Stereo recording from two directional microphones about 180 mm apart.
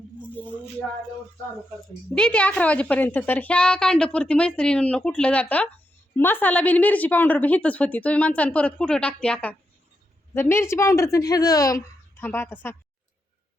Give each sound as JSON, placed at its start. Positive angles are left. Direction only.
{"t": 0.2, "sound": "music", "side_deg": 10}
{"t": 2.1, "sound": "a woman's voice", "side_deg": 5}